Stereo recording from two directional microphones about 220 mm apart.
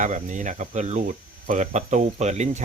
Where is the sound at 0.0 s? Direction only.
35° right (ahead or behind).